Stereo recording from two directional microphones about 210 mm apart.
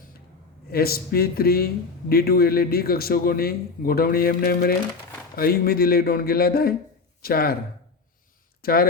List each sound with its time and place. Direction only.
0.7 s a man's voice: 45° left (ahead or behind)
8.6 s a man's voice: 45° left (ahead or behind)